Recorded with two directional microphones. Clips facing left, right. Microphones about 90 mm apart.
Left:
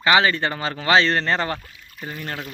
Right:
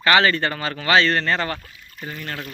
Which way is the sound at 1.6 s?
5° left (ahead or behind).